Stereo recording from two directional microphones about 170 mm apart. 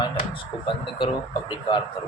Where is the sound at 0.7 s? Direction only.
25° left (ahead or behind).